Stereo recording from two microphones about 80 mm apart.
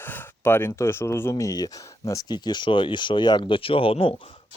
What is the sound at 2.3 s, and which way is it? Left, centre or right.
Speech, left.